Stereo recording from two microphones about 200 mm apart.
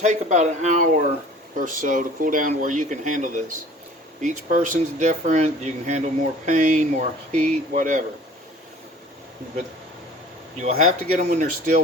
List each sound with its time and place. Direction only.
0.0 s speech: 35° right (ahead or behind)
10.6 s speech: 35° right (ahead or behind)